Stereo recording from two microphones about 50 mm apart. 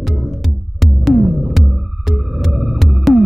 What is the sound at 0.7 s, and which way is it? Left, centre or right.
Music, centre.